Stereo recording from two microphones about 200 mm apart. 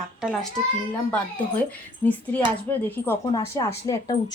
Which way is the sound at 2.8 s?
10° left (ahead or behind).